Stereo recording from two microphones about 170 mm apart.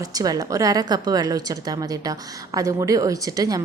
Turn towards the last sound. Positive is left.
turn(degrees=-20)  # may be behind; listen again after turning